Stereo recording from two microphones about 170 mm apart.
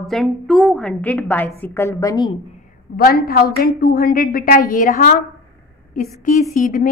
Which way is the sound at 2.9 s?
60° left (ahead or behind).